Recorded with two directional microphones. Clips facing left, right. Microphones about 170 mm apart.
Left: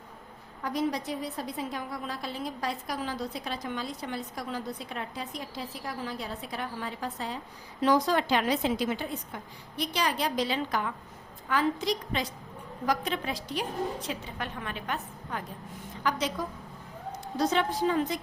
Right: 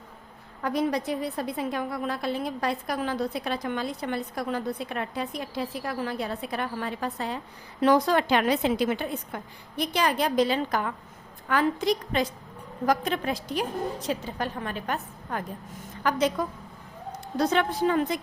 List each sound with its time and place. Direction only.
0.6 s a woman's voice: 60° right (ahead or behind)
17.3 s a woman's voice: 60° right (ahead or behind)